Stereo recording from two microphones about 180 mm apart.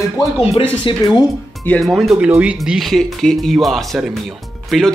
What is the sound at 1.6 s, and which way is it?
Speech, 5° left (ahead or behind).